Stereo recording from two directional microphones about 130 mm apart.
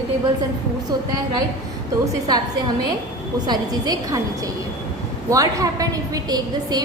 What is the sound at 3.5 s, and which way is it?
Speech, 30° right (ahead or behind).